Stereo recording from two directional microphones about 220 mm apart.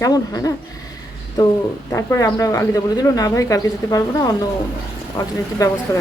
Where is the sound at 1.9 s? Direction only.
15° left (ahead or behind).